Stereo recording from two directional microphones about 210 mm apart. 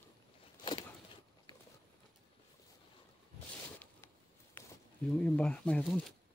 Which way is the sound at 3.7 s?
10° left (ahead or behind).